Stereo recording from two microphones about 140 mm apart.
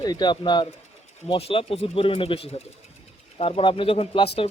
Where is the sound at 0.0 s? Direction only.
30° left (ahead or behind).